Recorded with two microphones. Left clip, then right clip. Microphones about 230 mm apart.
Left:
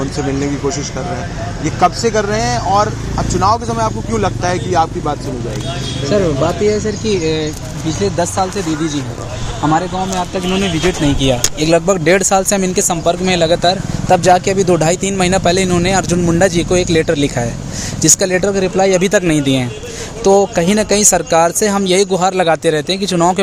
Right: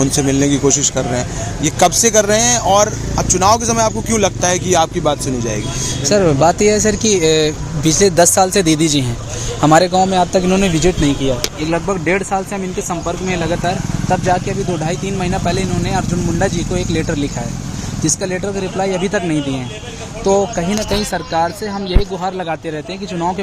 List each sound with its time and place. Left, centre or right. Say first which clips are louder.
1.6 s speech: right 1 dB; right
6.7 s speech: right 2 dB; right
11.2 s speech: left 4 dB; left